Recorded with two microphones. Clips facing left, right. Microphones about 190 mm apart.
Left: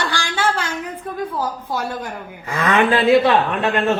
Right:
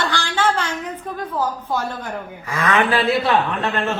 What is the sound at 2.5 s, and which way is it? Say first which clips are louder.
Speech: left 2 dB; 25° left (ahead or behind).